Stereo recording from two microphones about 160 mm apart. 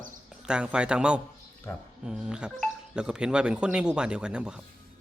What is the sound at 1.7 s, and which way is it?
Speech, 15° left (ahead or behind).